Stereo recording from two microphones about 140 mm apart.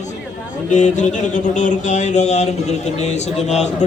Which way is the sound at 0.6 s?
60° left (ahead or behind).